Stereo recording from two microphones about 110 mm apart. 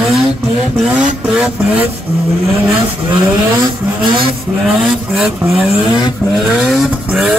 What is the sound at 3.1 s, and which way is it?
Vehicle, 45° right (ahead or behind).